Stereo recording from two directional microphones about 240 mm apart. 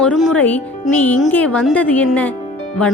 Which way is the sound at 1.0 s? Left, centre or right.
Centre.